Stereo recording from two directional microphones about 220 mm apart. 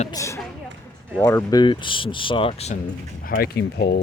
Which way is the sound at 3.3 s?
45° left (ahead or behind).